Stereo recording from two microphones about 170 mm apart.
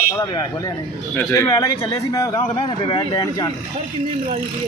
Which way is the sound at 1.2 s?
20° left (ahead or behind).